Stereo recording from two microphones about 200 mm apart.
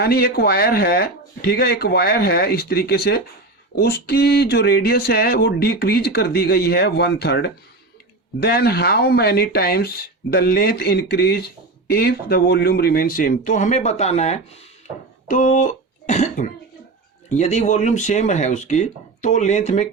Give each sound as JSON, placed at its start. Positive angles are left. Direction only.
{"t": 0.0, "sound": "speech", "side_deg": 50}